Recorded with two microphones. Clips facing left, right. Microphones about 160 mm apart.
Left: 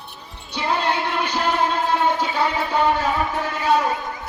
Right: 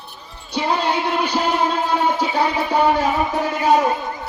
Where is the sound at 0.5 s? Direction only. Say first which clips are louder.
Right 2 dB; 15° right (ahead or behind).